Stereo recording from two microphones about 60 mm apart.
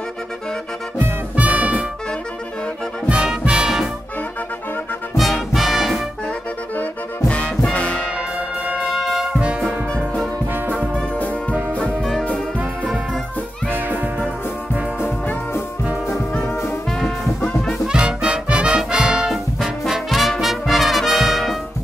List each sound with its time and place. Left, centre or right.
1.3 s music: right
3.1 s music: centre
5.1 s music: centre
7.2 s music: left
8.8 s brass instrument: centre
9.2 s brass instrument: centre
11.9 s music: centre
13.7 s music: right
16.6 s music: centre
17.8 s music: centre